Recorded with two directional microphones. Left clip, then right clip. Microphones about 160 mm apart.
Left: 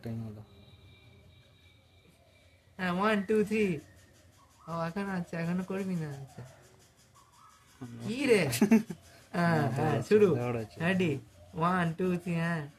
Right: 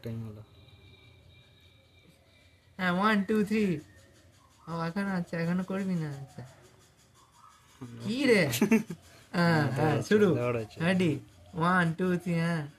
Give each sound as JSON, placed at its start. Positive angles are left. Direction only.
{"t": 2.7, "sound": "speech", "side_deg": -10}
{"t": 8.0, "sound": "speech", "side_deg": -10}
{"t": 8.5, "sound": "speech", "side_deg": 20}
{"t": 9.3, "sound": "speech", "side_deg": -10}
{"t": 10.3, "sound": "speech", "side_deg": 15}
{"t": 10.8, "sound": "speech", "side_deg": -10}